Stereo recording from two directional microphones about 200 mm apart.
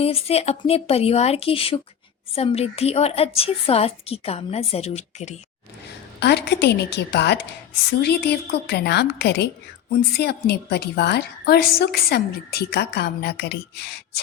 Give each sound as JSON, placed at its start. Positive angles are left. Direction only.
{"t": 0.0, "sound": "a woman's voice", "side_deg": 30}
{"t": 6.1, "sound": "a woman's voice", "side_deg": 55}